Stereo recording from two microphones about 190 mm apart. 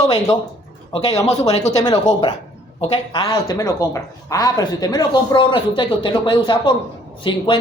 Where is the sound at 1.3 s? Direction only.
35° left (ahead or behind).